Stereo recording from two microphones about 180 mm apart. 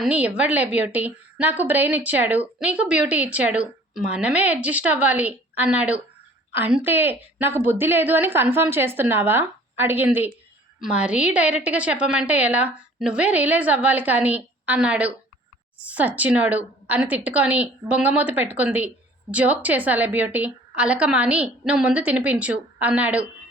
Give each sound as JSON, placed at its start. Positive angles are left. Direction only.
{"t": 0.0, "sound": "a woman's voice", "side_deg": -5}